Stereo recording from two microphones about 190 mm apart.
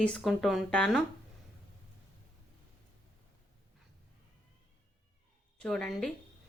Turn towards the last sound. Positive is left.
turn(degrees=0)  # may be behind; listen again after turning